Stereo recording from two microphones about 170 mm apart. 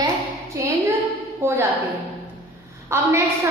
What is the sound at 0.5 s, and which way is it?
A woman's voice, 15° right (ahead or behind).